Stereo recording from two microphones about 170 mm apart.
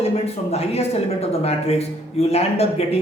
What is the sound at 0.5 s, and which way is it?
A man's voice, 35° left (ahead or behind).